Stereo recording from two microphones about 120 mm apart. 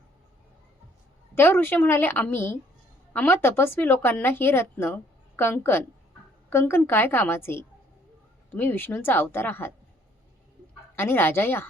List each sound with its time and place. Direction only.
1.4 s a woman's voice: 15° left (ahead or behind)
10.9 s speech: 20° left (ahead or behind)